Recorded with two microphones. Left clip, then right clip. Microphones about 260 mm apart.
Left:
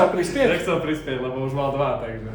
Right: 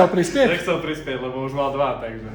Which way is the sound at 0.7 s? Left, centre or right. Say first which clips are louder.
Even; centre.